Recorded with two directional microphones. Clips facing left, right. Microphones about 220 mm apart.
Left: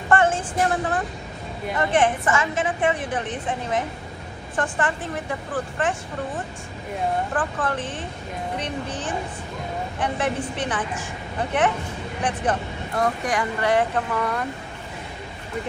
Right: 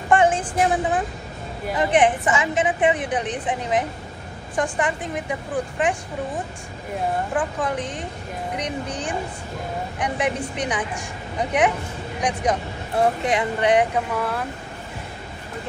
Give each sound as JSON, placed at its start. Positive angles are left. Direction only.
{"t": 0.1, "sound": "a woman's voice", "side_deg": -15}
{"t": 12.9, "sound": "speech", "side_deg": -25}